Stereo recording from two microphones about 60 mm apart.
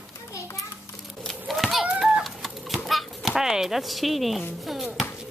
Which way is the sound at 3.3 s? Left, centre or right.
Centre.